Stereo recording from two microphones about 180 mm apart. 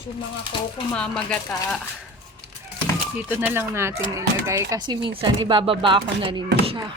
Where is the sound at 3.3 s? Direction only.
10° right (ahead or behind).